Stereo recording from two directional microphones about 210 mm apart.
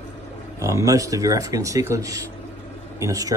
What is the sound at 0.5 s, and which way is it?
Speech, 15° right (ahead or behind).